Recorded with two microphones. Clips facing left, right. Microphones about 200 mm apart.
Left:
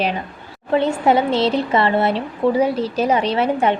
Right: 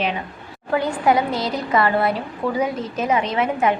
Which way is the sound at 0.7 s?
25° left (ahead or behind).